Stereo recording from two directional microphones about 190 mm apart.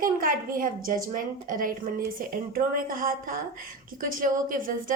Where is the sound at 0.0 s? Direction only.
50° right (ahead or behind).